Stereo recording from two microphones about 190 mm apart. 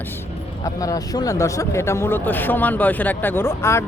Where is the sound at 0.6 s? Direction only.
20° left (ahead or behind).